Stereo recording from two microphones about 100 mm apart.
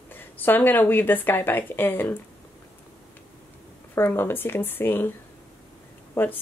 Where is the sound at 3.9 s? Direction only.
25° left (ahead or behind).